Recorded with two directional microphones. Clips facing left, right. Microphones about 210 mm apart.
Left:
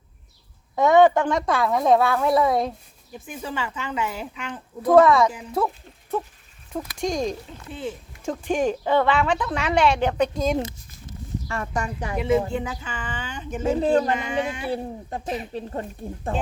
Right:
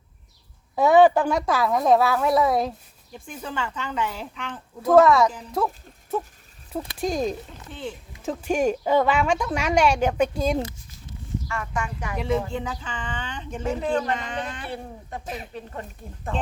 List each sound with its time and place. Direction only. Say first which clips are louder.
0.8 s speech: even; 5° right (ahead or behind)
7.7 s speech: left 3 dB; 5° left (ahead or behind)
8.2 s speech: even; 5° right (ahead or behind)
11.4 s speech: left 3 dB; 35° left (ahead or behind)
12.1 s speech: left 4 dB; 5° left (ahead or behind)
13.7 s speech: left 5 dB; 35° left (ahead or behind)
14.1 s speech: left 4 dB; 10° left (ahead or behind)
14.7 s speech: left 6 dB; 30° left (ahead or behind)